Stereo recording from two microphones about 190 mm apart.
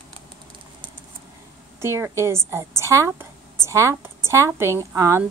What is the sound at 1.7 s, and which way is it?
A woman's voice, 15° right (ahead or behind).